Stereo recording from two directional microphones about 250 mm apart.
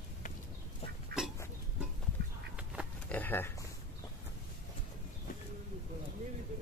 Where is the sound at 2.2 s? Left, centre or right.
Right.